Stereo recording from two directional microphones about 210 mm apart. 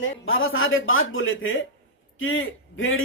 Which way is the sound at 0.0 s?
70° left (ahead or behind).